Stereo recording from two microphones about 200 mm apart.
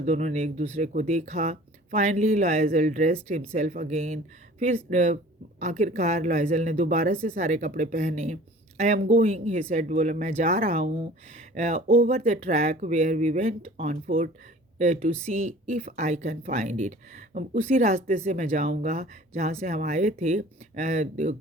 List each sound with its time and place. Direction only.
0.0 s speech: 35° right (ahead or behind)